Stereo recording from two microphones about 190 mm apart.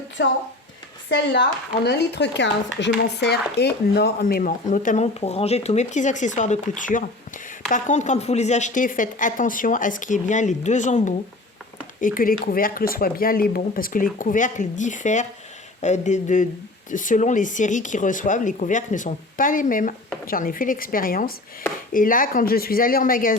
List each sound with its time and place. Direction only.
0.2 s speech: 70° left (ahead or behind); by 23.4 s 45° left (ahead or behind)